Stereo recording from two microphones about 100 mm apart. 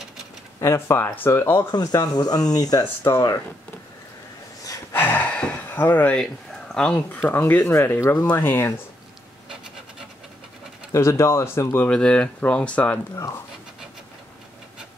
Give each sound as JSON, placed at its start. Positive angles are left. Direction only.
{"t": 0.6, "sound": "speech", "side_deg": 25}
{"t": 1.7, "sound": "speech", "side_deg": 40}
{"t": 4.9, "sound": "gasp", "side_deg": 15}
{"t": 6.1, "sound": "speech", "side_deg": 5}
{"t": 10.9, "sound": "speech", "side_deg": 30}
{"t": 11.9, "sound": "speech", "side_deg": 10}
{"t": 13.1, "sound": "speech", "side_deg": 30}